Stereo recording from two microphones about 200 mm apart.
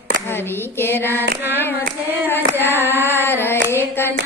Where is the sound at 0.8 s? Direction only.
10° left (ahead or behind).